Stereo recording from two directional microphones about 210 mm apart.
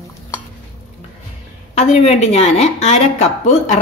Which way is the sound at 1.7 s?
30° left (ahead or behind).